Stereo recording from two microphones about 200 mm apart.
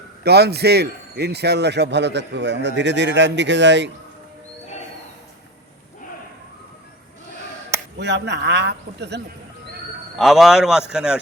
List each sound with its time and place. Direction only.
0.3 s speech: 55° right (ahead or behind)
7.9 s speech: 60° right (ahead or behind)
10.2 s a man's voice: centre (ahead or behind)